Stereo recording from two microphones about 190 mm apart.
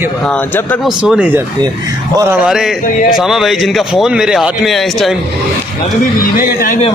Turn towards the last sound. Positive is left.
turn(degrees=45)  # may be behind; listen again after turning